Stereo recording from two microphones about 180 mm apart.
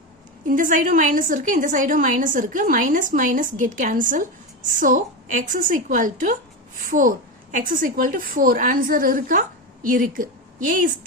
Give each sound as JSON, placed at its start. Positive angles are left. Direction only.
{"t": 0.4, "sound": "a woman's voice", "side_deg": -45}